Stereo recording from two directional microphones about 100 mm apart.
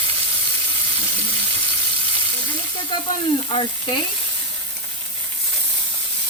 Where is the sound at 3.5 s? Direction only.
70° left (ahead or behind).